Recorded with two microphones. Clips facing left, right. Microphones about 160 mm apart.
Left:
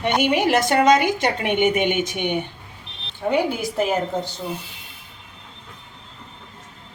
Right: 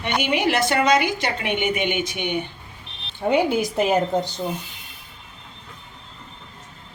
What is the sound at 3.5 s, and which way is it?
Speech, 15° right (ahead or behind).